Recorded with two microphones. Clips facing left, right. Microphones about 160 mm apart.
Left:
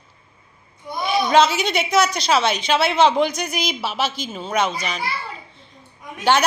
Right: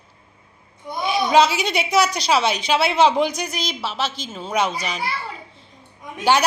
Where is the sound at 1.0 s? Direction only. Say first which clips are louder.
Even; centre (ahead or behind).